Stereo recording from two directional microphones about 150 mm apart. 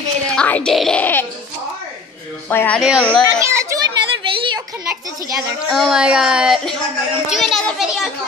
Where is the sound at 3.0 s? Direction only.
5° left (ahead or behind).